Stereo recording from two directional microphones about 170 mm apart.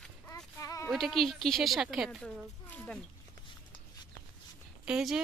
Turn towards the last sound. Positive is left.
turn(degrees=-5)  # may be behind; listen again after turning